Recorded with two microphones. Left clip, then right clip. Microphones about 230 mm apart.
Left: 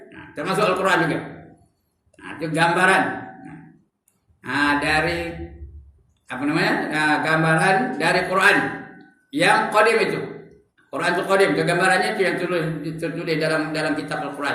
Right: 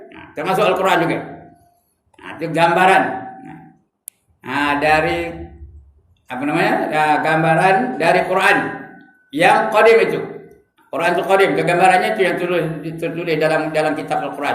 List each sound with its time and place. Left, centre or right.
0.1 s a man's voice: centre
4.4 s a man's voice: centre